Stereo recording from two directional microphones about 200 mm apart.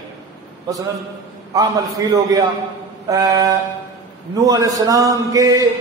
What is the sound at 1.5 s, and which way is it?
A man's voice, 15° right (ahead or behind).